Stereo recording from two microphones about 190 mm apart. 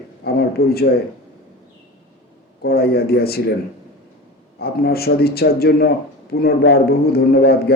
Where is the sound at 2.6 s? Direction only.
55° left (ahead or behind).